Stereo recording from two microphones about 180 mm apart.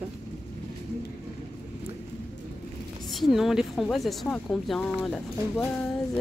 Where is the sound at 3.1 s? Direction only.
Centre (ahead or behind).